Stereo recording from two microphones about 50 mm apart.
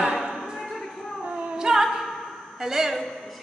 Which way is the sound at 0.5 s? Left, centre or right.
Centre.